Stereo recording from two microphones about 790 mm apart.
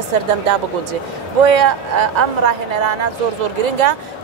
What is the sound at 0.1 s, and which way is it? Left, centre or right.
Speech, right.